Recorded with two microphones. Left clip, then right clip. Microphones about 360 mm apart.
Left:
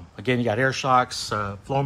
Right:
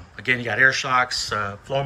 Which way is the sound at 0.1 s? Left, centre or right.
Centre.